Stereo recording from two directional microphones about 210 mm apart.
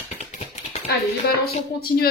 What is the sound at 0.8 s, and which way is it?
Speech, 50° left (ahead or behind).